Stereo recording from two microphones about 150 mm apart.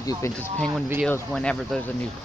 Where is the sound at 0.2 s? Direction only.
20° left (ahead or behind).